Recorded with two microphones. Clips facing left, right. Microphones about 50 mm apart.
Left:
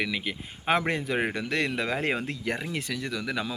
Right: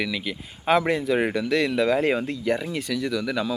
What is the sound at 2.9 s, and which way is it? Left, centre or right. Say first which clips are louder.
Speech: right 8 dB; centre.